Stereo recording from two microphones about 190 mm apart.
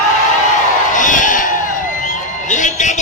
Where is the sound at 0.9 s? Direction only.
40° left (ahead or behind).